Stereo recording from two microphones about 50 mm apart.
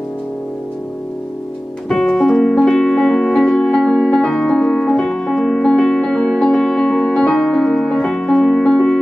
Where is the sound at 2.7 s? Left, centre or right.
Centre.